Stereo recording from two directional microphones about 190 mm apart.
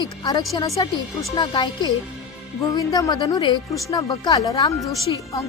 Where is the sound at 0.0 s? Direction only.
20° left (ahead or behind).